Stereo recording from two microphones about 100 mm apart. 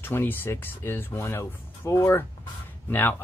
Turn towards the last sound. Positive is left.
turn(degrees=15)  # may be behind; listen again after turning